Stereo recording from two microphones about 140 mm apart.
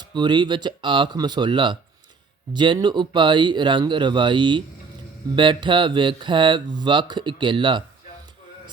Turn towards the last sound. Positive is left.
turn(degrees=-35)  # may be behind; listen again after turning